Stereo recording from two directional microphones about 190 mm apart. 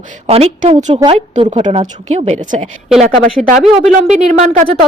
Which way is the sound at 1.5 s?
35° right (ahead or behind).